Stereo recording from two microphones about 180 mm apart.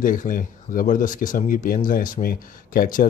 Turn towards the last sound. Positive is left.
turn(degrees=50)  # may be behind; listen again after turning